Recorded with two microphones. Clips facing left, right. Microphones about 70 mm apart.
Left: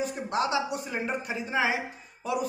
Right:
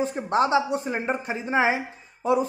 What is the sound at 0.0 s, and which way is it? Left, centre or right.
Speech, right.